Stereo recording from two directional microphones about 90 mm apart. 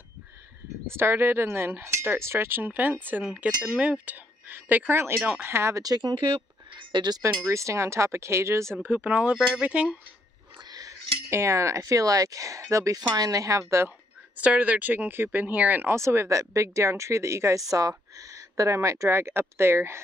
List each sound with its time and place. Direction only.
0.9 s speech: 25° right (ahead or behind)
3.3 s speech: 10° right (ahead or behind); by 6.1 s 45° right (ahead or behind)
6.7 s a sound: 60° right (ahead or behind)
7.4 s speech: 35° right (ahead or behind)
8.8 s speech: 15° right (ahead or behind)
10.6 s speech: 45° right (ahead or behind)
13.8 s speech: 15° right (ahead or behind)